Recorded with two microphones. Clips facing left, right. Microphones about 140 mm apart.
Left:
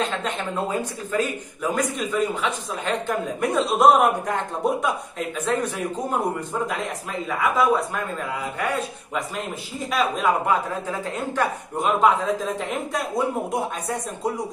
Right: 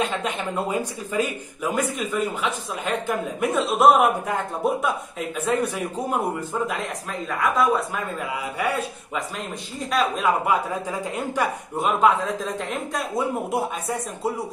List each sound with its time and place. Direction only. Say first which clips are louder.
0.0 s speech: right 1 dB; 10° right (ahead or behind)
5.5 s a man's voice: right 1 dB; 10° right (ahead or behind)
6.7 s a man's voice: left 1 dB; centre (ahead or behind)
10.9 s a man's voice: even; 10° right (ahead or behind)
12.0 s speech: even; centre (ahead or behind)